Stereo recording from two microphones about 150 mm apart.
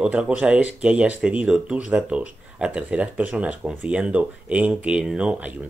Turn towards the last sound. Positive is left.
turn(degrees=-5)  # may be behind; listen again after turning